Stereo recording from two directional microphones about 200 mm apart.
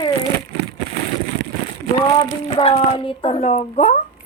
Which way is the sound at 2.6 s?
30° left (ahead or behind).